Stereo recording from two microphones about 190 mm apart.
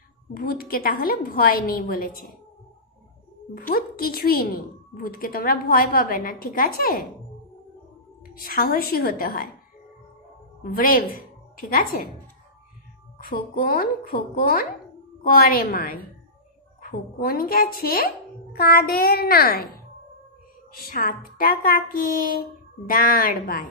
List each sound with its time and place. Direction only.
0.3 s a woman's voice: 50° left (ahead or behind)
3.5 s a woman's voice: 50° left (ahead or behind)
8.4 s a woman's voice: 50° left (ahead or behind)
10.6 s a woman's voice: 50° left (ahead or behind)
13.2 s a woman's voice: 50° left (ahead or behind)
17.2 s a woman's voice: 50° left (ahead or behind)
20.8 s a woman's voice: 50° left (ahead or behind)